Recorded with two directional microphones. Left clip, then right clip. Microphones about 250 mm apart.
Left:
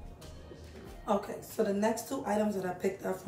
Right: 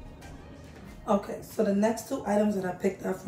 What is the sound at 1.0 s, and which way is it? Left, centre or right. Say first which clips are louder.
Speech: right 4 dB; centre.